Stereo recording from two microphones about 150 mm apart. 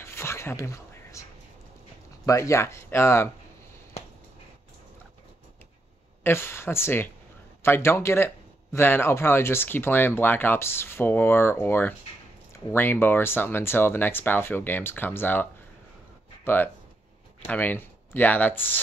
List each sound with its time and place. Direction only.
0.0 s a sound: 15° left (ahead or behind)
2.2 s speech: 20° left (ahead or behind)
6.2 s speech: 15° left (ahead or behind)
16.4 s speech: 15° left (ahead or behind)